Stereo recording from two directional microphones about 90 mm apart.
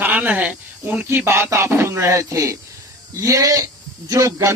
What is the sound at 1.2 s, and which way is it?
A man's voice, 30° right (ahead or behind).